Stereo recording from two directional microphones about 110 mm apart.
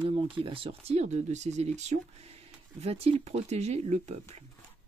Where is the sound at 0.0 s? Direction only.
55° right (ahead or behind); by 4.5 s 85° right.